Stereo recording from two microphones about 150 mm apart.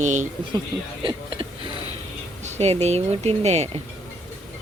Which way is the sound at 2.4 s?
45° right (ahead or behind).